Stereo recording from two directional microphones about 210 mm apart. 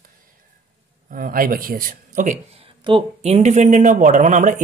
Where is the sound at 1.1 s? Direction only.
40° right (ahead or behind).